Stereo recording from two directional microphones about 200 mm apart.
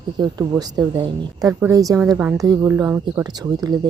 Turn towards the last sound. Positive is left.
turn(degrees=-20)  # may be behind; listen again after turning